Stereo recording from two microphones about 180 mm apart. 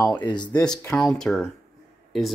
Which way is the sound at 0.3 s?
20° left (ahead or behind).